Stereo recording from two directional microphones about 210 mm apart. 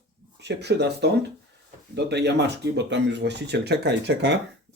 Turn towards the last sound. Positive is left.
turn(degrees=-55)  # may be behind; listen again after turning